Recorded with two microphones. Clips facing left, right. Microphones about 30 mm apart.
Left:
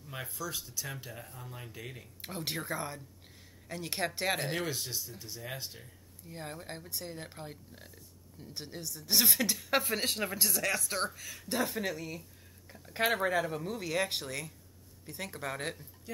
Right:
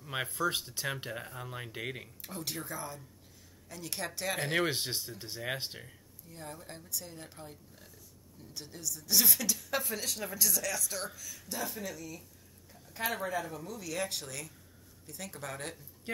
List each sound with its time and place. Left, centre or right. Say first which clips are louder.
0.0 s speech: right 7 dB; right
2.2 s a woman's voice: left 4 dB; left
4.5 s speech: right 4 dB; right
6.2 s a woman's voice: left 3 dB; left